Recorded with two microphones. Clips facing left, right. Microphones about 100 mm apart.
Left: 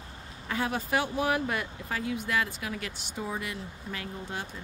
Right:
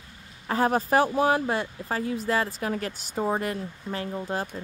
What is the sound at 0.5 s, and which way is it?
Speech, 40° right (ahead or behind).